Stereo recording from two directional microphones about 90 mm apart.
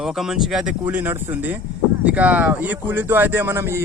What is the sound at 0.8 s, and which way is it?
Speech, 25° right (ahead or behind).